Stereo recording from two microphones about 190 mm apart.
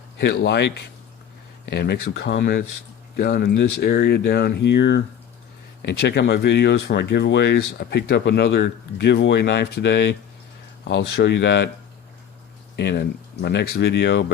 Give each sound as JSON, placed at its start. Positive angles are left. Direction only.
{"t": 0.2, "sound": "speech", "side_deg": 65}
{"t": 12.7, "sound": "speech", "side_deg": 65}